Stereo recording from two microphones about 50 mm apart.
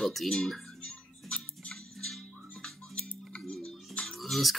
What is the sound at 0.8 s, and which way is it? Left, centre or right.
Music, left.